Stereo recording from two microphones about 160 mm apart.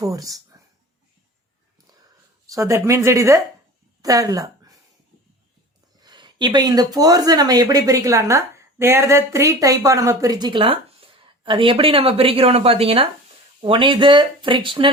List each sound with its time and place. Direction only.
0.0 s speech: 20° right (ahead or behind)
2.5 s speech: 20° right (ahead or behind)
6.0 s speech: 25° right (ahead or behind)